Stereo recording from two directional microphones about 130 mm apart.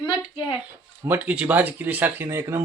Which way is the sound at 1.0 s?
15° right (ahead or behind).